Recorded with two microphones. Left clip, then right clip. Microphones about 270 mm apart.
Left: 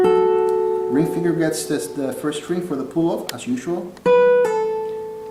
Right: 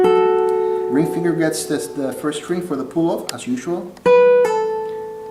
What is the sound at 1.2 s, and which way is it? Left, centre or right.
Speech, centre.